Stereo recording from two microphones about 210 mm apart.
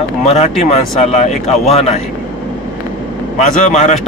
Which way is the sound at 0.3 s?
30° left (ahead or behind).